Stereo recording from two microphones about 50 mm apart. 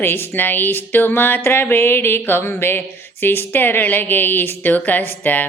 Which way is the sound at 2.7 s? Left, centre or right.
Left.